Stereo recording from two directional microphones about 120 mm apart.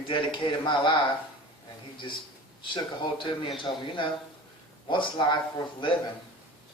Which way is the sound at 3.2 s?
45° left (ahead or behind).